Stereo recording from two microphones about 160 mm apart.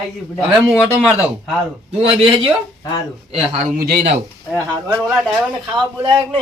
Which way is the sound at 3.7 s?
65° right (ahead or behind).